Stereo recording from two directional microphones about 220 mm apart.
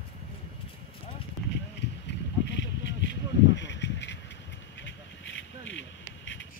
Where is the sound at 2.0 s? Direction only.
55° left (ahead or behind).